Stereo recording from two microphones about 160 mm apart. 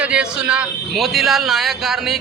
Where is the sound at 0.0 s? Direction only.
5° right (ahead or behind).